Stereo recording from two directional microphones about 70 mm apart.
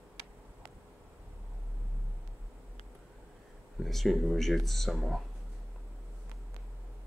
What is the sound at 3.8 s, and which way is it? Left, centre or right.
Speech, centre.